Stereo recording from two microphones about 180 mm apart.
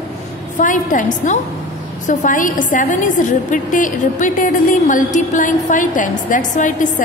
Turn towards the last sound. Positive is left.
turn(degrees=45)  # may be behind; listen again after turning